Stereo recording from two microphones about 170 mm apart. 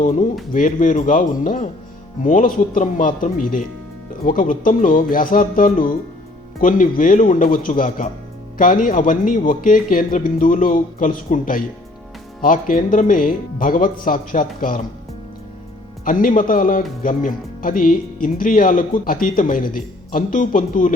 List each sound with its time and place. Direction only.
0.0 s speech: 45° left (ahead or behind)
16.0 s speech: 50° left (ahead or behind)